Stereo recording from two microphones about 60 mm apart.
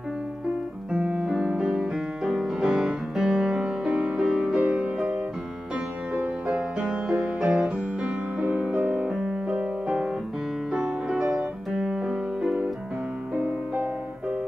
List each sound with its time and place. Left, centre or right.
1.1 s music: centre
4.9 s music: centre
13.3 s music: right